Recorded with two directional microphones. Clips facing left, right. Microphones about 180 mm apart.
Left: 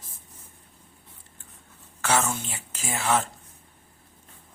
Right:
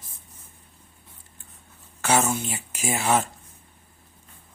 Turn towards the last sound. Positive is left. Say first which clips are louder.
# right 2 dB
turn(degrees=-15)  # may be behind; listen again after turning